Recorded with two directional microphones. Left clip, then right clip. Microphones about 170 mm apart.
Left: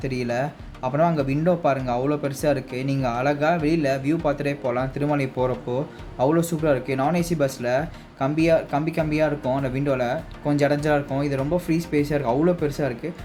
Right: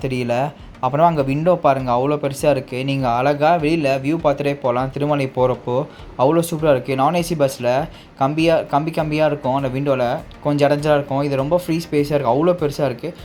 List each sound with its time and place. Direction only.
0.0 s speech: 15° right (ahead or behind)